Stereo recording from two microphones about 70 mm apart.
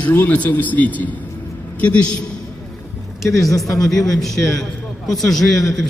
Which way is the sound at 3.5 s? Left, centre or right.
Left.